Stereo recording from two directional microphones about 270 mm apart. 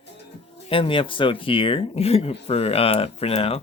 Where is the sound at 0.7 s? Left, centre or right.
Centre.